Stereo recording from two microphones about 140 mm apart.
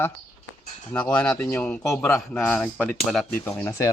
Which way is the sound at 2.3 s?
10° left (ahead or behind).